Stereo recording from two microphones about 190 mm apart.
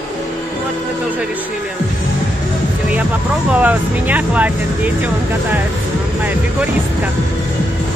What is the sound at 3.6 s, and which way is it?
Speech, 10° right (ahead or behind).